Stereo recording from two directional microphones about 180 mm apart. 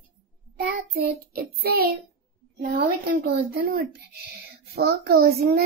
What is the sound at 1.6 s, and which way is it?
A child's voice, 60° right (ahead or behind).